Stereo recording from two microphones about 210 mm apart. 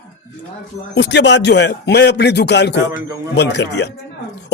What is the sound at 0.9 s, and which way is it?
A man's voice, 55° left (ahead or behind).